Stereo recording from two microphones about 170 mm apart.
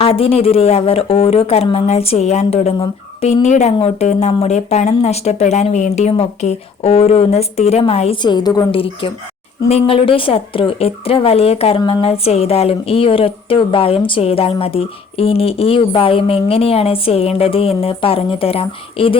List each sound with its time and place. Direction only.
0.0 s speech: 35° left (ahead or behind)